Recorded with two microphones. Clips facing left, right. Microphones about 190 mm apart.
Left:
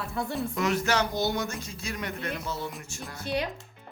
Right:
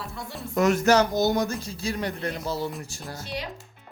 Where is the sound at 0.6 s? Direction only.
45° right (ahead or behind).